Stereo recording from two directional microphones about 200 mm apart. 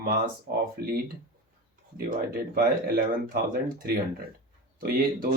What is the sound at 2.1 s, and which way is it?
Speech, 45° right (ahead or behind).